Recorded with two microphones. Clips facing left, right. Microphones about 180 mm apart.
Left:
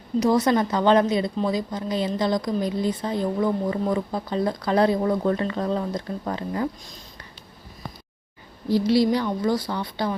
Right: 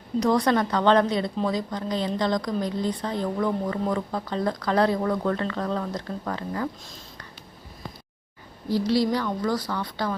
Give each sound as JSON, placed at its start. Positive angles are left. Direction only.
{"t": 0.2, "sound": "speech", "side_deg": 5}
{"t": 8.7, "sound": "speech", "side_deg": 15}